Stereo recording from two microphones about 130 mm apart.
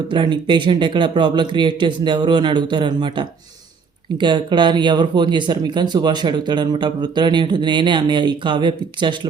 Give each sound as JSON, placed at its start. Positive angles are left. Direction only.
{"t": 0.1, "sound": "speech", "side_deg": -40}